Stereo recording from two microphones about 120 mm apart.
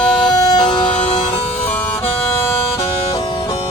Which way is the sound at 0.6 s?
10° left (ahead or behind).